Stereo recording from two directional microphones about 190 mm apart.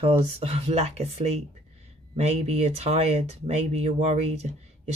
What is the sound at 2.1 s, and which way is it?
Speech, 35° right (ahead or behind).